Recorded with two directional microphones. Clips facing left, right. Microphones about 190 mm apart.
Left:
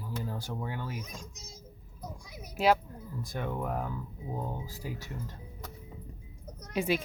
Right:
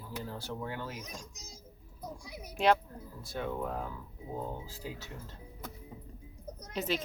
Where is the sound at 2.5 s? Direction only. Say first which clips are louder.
Left 1 dB; 5° left (ahead or behind).